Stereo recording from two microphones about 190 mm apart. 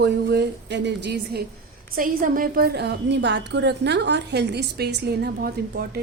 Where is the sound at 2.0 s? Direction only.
45° right (ahead or behind).